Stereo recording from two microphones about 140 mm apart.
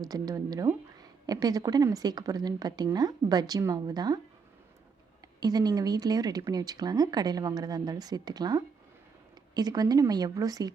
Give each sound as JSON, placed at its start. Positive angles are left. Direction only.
{"t": 0.0, "sound": "speech", "side_deg": -25}
{"t": 5.4, "sound": "speech", "side_deg": -30}